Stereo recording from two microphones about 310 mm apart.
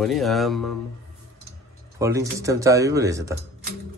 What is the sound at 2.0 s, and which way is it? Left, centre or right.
Speech, centre.